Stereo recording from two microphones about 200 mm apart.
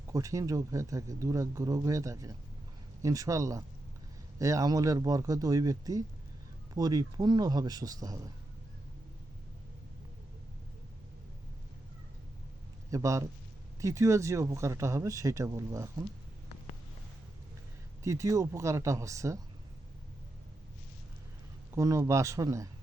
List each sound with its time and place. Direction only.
0.1 s a man's voice: 15° right (ahead or behind)
12.9 s speech: 15° right (ahead or behind)
18.0 s speech: 15° right (ahead or behind)
21.8 s speech: 15° right (ahead or behind)